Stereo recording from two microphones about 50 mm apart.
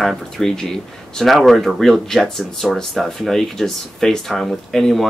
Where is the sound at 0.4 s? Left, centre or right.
Centre.